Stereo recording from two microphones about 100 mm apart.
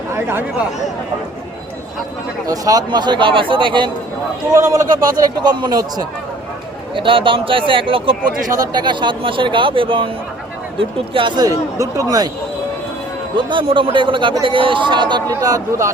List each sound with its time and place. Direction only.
2.5 s speech: 40° right (ahead or behind); by 3.9 s 55° right (ahead or behind)
4.5 s a man's voice: 30° right (ahead or behind)
6.9 s a man's voice: 60° right (ahead or behind)
8.5 s a man's voice: 40° right (ahead or behind); by 11.3 s 60° right (ahead or behind)
11.8 s a man's voice: 35° right (ahead or behind)
13.3 s a man's voice: 55° right (ahead or behind)
15.3 s a man's voice: 35° right (ahead or behind)